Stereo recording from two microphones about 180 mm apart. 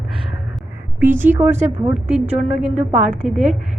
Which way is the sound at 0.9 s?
10° right (ahead or behind).